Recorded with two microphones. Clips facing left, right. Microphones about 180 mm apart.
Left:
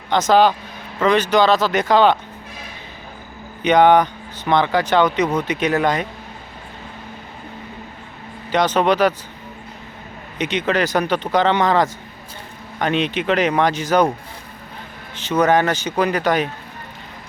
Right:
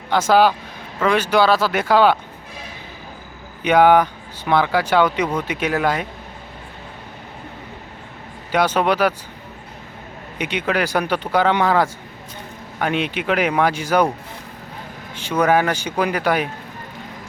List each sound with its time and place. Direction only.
0.1 s speech: 10° right (ahead or behind)
3.6 s speech: 5° right (ahead or behind)
8.5 s speech: 10° right (ahead or behind)
10.3 s speech: 10° right (ahead or behind)
15.1 s speech: 10° right (ahead or behind)